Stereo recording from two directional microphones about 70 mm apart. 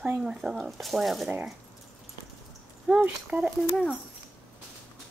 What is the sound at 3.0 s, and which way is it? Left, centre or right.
Speech, centre.